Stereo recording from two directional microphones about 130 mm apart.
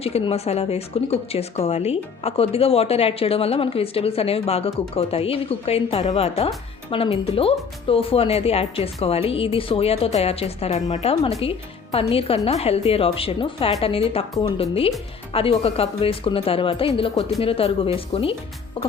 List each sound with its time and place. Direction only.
0.0 s speech: 50° left (ahead or behind)
11.1 s speech: 50° left (ahead or behind)
15.3 s speech: 45° left (ahead or behind)